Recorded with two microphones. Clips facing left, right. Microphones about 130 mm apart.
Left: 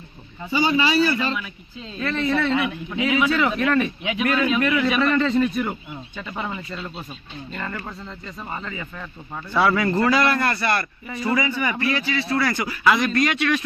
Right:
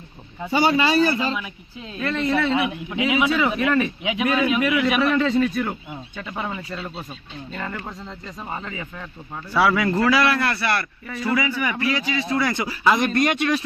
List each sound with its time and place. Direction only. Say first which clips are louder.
0.7 s a man's voice: even; 50° right (ahead or behind)
1.1 s a man's voice: even; 20° right (ahead or behind)
2.0 s a man's voice: even; 5° right (ahead or behind)
6.1 s a man's voice: even; 10° right (ahead or behind); by 13.0 s 25° right (ahead or behind)
13.0 s a man's voice: right 1 dB; 50° right (ahead or behind)